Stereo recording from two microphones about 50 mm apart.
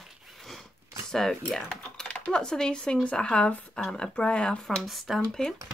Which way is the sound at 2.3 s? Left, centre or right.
Centre.